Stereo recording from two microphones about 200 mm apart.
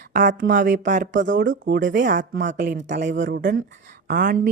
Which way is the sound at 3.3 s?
50° right (ahead or behind).